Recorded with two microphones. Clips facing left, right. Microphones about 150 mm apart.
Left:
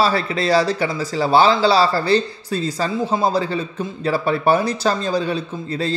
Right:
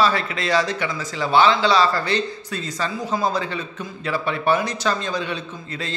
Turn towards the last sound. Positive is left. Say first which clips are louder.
# left 8 dB
turn(degrees=35)  # may be behind; listen again after turning